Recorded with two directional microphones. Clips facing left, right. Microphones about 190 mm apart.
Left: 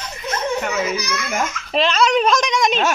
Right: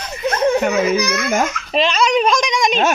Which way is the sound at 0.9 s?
55° right (ahead or behind).